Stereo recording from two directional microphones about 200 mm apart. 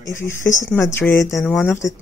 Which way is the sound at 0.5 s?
15° left (ahead or behind).